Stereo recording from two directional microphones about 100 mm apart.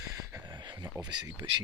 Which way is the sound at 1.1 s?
50° right (ahead or behind).